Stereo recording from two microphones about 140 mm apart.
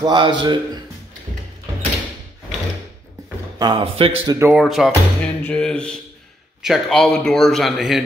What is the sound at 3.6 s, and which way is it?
Speech, 35° right (ahead or behind).